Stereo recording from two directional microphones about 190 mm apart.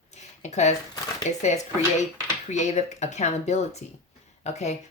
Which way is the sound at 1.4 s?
40° left (ahead or behind).